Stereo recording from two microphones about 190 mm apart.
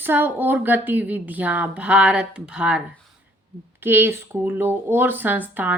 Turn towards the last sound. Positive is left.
turn(degrees=-10)  # may be behind; listen again after turning